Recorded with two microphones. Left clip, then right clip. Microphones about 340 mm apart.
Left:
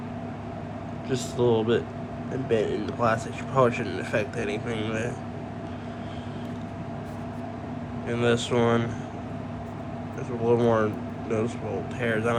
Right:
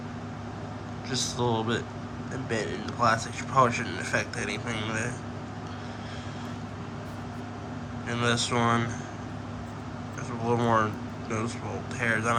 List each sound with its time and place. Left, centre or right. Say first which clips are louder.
1.1 s speech: left 4 dB; centre
8.0 s speech: left 3 dB; centre
10.4 s speech: left 3 dB; centre